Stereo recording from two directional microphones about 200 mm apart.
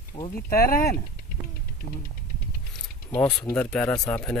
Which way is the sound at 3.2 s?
10° left (ahead or behind).